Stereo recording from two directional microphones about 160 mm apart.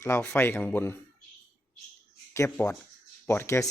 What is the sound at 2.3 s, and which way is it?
Speech, 20° left (ahead or behind).